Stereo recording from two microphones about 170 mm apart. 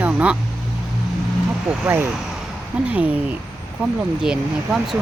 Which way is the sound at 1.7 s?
10° right (ahead or behind).